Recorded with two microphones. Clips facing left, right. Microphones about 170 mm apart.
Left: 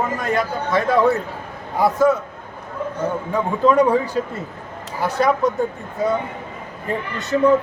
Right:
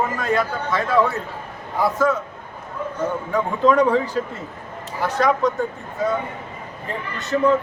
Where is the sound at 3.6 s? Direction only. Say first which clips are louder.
Left 1 dB; 10° left (ahead or behind).